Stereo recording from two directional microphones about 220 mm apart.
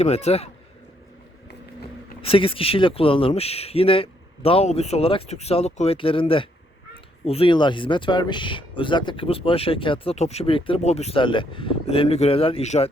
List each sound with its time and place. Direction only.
0.0 s speech: 30° left (ahead or behind)
2.2 s speech: 25° left (ahead or behind)